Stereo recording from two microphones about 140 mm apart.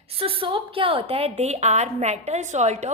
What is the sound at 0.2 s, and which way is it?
A woman's voice, 40° right (ahead or behind).